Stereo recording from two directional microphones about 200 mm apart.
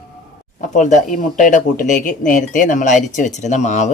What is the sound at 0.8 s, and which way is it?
Speech, 40° left (ahead or behind).